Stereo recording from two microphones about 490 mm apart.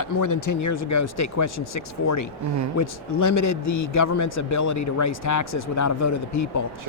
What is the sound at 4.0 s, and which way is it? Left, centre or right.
Speech, left.